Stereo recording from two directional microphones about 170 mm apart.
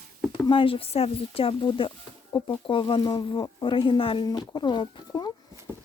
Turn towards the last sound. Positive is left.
turn(degrees=25)  # may be behind; listen again after turning